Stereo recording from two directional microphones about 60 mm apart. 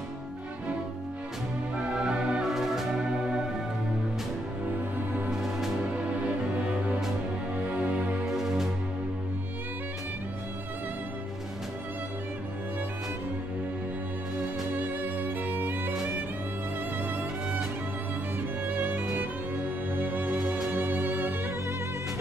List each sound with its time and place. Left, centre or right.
2.0 s music: centre
2.4 s music: centre
4.6 s music: right
5.3 s music: centre
5.9 s music: right
8.3 s music: centre
14.7 s music: right
18.7 s music: right